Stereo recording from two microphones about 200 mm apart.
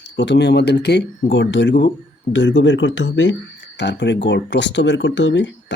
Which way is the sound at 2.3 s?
70° left (ahead or behind).